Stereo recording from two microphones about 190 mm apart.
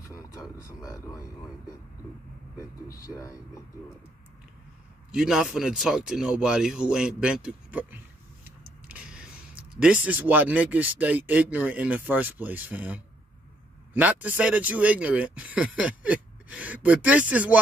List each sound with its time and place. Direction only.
0.8 s speech: 15° left (ahead or behind)
3.1 s speech: 20° left (ahead or behind)
5.1 s speech: 5° right (ahead or behind)